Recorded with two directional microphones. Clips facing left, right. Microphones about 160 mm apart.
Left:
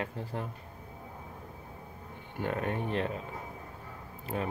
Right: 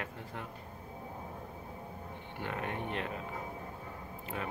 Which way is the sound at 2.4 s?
40° left (ahead or behind).